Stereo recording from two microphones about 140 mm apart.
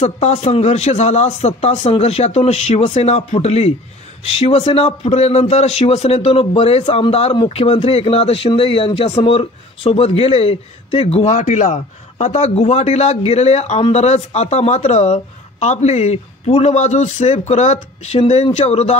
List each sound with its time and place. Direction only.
0.0 s a man's voice: 50° left (ahead or behind)